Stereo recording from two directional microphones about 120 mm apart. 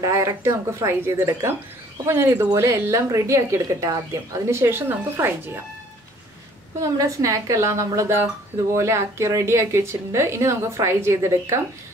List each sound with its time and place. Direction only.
0.0 s speech: 25° right (ahead or behind)
6.8 s speech: 25° right (ahead or behind)